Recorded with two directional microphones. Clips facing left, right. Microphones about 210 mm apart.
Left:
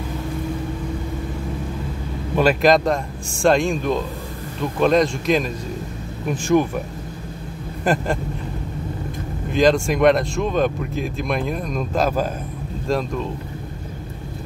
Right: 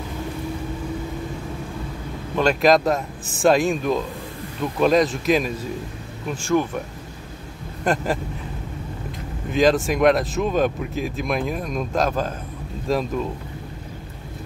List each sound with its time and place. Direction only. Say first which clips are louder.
2.3 s speech: left 1 dB; centre (ahead or behind)
6.3 s speech: left 3 dB; 15° left (ahead or behind)
7.8 s speech: left 1 dB; centre (ahead or behind)
9.5 s speech: left 1 dB; centre (ahead or behind)